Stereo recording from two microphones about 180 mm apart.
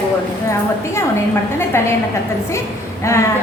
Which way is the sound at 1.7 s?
15° left (ahead or behind).